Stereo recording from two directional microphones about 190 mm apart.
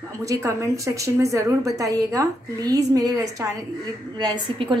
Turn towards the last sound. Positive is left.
turn(degrees=-25)  # may be behind; listen again after turning